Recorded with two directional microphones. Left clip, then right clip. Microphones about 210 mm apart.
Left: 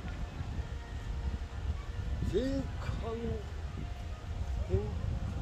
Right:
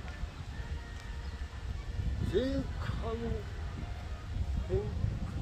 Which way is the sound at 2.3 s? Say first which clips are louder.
Right 1 dB; 25° right (ahead or behind).